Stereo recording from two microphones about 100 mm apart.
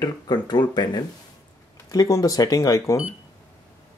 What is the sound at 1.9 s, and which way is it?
Speech, 35° left (ahead or behind).